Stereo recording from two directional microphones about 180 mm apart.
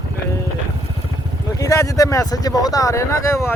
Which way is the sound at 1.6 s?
20° left (ahead or behind).